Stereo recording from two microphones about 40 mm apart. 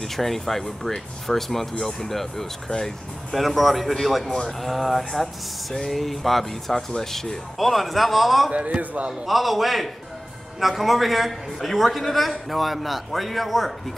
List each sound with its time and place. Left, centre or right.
0.1 s a man's voice: centre
8.5 s a man's voice: right
9.2 s a man's voice: centre